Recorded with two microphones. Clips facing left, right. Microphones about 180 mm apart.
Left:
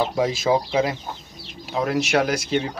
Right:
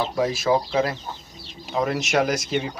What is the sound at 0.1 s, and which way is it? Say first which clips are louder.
Speech: left 1 dB; 20° left (ahead or behind).